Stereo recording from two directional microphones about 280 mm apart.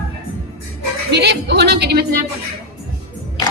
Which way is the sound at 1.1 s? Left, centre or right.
Right.